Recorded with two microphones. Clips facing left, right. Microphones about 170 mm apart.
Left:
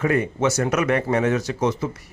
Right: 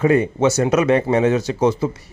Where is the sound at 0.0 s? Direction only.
25° right (ahead or behind).